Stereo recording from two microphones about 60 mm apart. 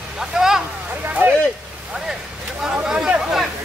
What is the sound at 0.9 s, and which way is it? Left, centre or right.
Speech, right.